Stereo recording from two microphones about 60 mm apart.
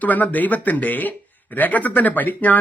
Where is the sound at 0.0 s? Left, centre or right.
Left.